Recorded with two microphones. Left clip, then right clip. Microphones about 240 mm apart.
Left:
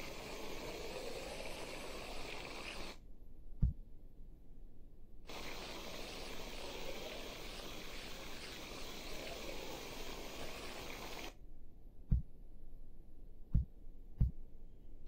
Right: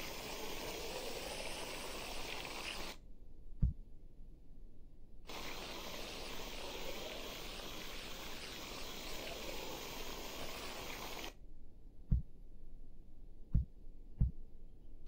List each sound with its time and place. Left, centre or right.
0.0 s vehicle: centre
5.2 s a sound: centre
12.1 s heart sounds: centre
13.5 s heart sounds: centre